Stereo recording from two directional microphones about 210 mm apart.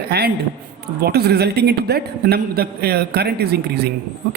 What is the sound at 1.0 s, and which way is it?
A man's voice, 50° right (ahead or behind).